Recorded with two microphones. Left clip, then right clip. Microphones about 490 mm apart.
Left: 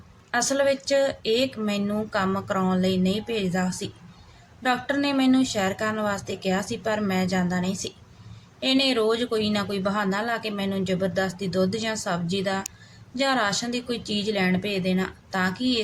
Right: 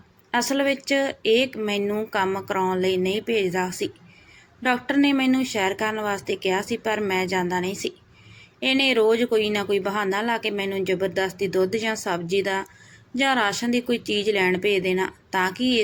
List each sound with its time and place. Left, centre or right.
0.3 s speech: left